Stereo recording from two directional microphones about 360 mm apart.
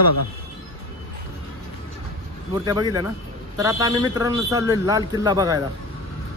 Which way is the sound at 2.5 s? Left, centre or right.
Centre.